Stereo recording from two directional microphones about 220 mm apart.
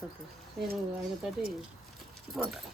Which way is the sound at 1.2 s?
Centre (ahead or behind).